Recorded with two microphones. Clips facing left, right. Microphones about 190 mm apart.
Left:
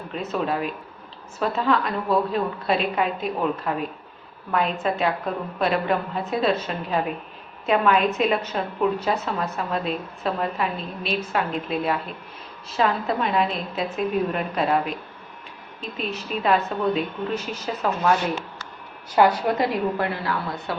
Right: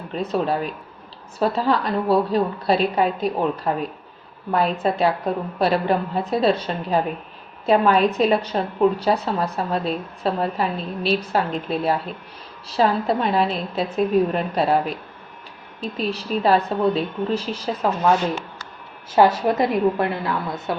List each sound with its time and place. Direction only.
0.1 s a woman's voice: 35° right (ahead or behind)
19.1 s a woman's voice: 25° right (ahead or behind)